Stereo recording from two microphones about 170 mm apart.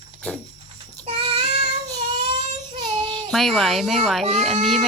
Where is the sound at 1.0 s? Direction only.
35° right (ahead or behind).